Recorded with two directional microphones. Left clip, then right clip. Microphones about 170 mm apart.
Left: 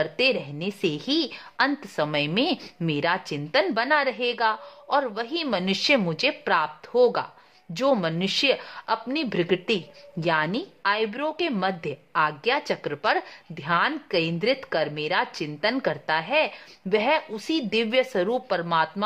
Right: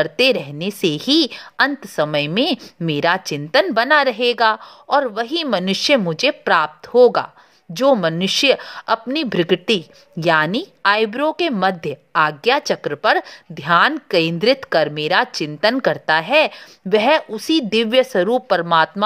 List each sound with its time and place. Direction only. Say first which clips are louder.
0.0 s a woman's voice: right 7 dB; 30° right (ahead or behind)